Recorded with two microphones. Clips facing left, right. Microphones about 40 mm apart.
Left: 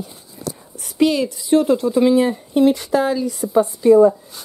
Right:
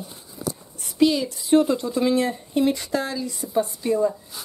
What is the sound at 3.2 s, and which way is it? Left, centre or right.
Speech, centre.